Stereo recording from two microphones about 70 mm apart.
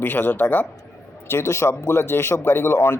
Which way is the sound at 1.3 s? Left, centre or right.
Left.